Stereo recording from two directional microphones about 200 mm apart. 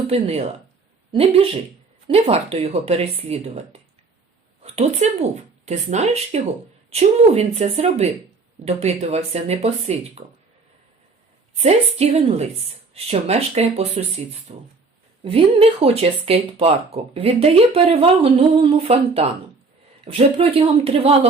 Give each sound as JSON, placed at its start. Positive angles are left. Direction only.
{"t": 0.1, "sound": "speech", "side_deg": -30}
{"t": 11.5, "sound": "speech", "side_deg": -30}